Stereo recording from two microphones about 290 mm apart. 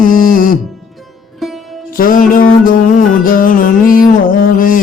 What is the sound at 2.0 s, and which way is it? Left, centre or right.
Music, left.